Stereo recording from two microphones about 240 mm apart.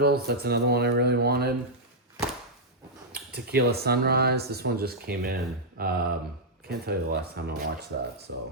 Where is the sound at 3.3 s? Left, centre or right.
Right.